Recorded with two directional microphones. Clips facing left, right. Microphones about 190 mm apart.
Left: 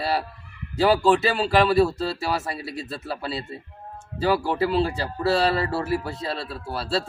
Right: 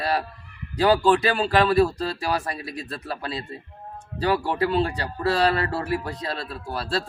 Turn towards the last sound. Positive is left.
turn(degrees=0)  # may be behind; listen again after turning